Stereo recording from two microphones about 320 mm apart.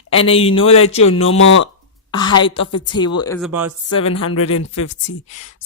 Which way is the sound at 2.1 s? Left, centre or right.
Centre.